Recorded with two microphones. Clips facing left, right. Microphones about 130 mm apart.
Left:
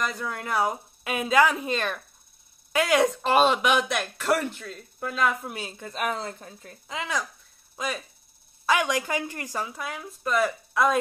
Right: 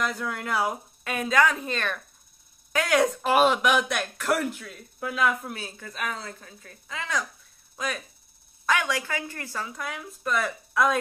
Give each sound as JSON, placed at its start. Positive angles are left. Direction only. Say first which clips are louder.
{"t": 0.0, "sound": "speech", "louder": "right 1 dB", "side_deg": 0}
{"t": 5.5, "sound": "speech", "louder": "left 2 dB", "side_deg": 20}
{"t": 7.0, "sound": "speech", "louder": "even", "side_deg": 5}
{"t": 8.8, "sound": "speech", "louder": "left 3 dB", "side_deg": 15}
{"t": 9.7, "sound": "speech", "louder": "even", "side_deg": 5}